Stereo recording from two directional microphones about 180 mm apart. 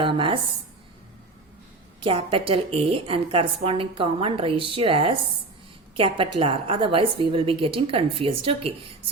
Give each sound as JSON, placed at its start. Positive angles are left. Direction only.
{"t": 0.0, "sound": "a woman's voice", "side_deg": -30}
{"t": 2.0, "sound": "a woman's voice", "side_deg": -30}